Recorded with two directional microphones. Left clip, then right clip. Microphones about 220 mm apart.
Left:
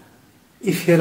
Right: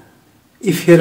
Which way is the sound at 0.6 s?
25° right (ahead or behind).